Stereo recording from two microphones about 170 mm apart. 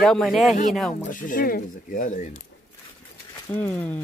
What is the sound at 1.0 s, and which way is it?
Speech, 55° left (ahead or behind).